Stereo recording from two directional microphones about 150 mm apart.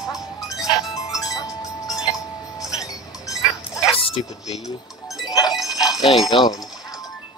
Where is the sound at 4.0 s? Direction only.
35° left (ahead or behind).